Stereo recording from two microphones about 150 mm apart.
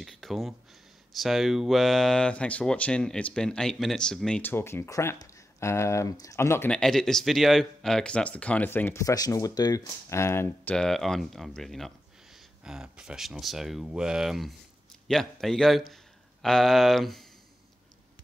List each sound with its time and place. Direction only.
0.0 s a sound: centre (ahead or behind)
1.1 s speech: centre (ahead or behind); by 6.7 s 15° left (ahead or behind)
6.7 s speech: 5° left (ahead or behind)